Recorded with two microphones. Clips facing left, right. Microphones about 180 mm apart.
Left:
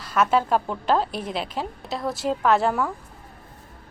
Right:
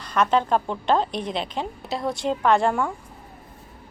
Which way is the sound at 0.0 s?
5° left (ahead or behind).